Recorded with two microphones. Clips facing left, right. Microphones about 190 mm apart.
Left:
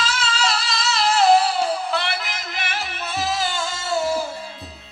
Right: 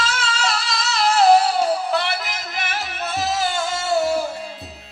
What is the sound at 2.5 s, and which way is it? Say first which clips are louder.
Music: right 2 dB; 50° right (ahead or behind).